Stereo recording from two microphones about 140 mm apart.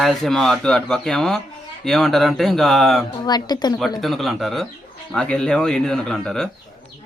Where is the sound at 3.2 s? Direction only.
30° left (ahead or behind).